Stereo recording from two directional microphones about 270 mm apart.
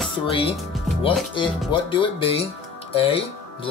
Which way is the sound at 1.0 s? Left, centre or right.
Centre.